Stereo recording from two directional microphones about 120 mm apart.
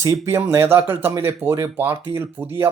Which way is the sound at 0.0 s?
25° right (ahead or behind).